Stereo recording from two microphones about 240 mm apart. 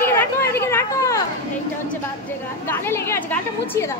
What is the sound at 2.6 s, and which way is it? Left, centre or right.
Speech, centre.